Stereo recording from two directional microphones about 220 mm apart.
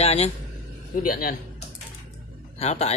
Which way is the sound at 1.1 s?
40° left (ahead or behind).